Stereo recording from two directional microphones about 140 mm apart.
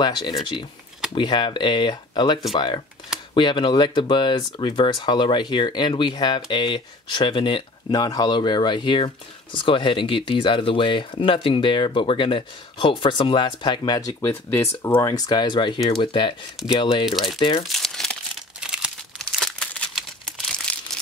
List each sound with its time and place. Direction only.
0.0 s speech: 30° left (ahead or behind)
17.6 s crumpling: centre (ahead or behind)